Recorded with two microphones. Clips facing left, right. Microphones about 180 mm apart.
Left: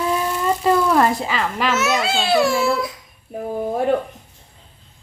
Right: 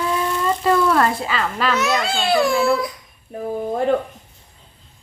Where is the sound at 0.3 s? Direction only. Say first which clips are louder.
Even; 10° left (ahead or behind).